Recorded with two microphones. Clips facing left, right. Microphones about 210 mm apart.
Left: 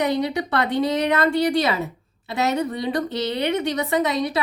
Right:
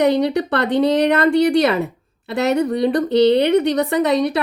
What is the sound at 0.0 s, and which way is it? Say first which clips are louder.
A woman's voice: right 6 dB; 60° right (ahead or behind).